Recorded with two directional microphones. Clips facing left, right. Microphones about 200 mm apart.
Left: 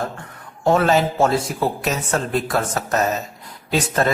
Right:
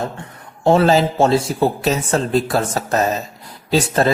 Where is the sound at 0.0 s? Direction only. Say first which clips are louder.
Right 2 dB; 25° right (ahead or behind).